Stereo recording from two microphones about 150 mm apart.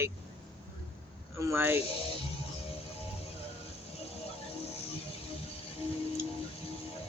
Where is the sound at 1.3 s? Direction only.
15° right (ahead or behind).